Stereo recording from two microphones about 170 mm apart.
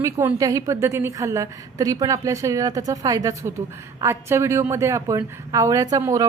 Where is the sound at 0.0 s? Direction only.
15° right (ahead or behind).